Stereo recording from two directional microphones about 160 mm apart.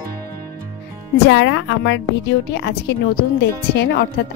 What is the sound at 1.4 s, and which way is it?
A woman's voice, 90° left.